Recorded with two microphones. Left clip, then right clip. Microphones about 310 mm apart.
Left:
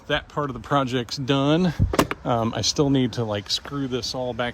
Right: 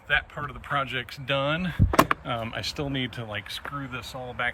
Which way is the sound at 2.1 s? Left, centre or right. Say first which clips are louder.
Right 5 dB; centre.